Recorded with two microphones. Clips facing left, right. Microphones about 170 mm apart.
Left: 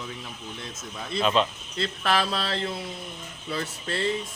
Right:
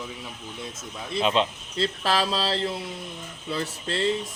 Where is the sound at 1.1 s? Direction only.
20° right (ahead or behind).